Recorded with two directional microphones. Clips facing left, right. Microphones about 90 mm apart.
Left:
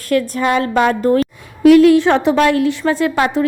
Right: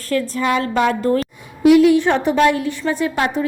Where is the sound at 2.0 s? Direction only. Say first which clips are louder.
Left 2 dB; 90° left.